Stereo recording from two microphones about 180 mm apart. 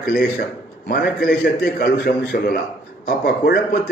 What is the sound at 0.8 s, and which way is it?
A man's voice, 55° left (ahead or behind).